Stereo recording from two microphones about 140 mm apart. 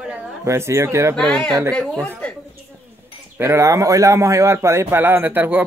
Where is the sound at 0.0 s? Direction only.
5° right (ahead or behind).